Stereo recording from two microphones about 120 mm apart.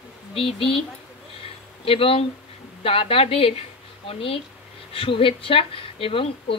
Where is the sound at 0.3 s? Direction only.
50° left (ahead or behind).